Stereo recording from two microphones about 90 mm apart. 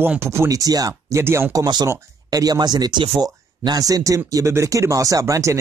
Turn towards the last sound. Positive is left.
turn(degrees=-35)  # may be behind; listen again after turning